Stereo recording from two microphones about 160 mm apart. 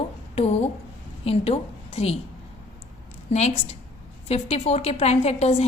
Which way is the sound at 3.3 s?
45° left (ahead or behind).